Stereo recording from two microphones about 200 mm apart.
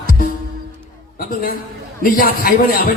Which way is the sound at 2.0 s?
45° left (ahead or behind).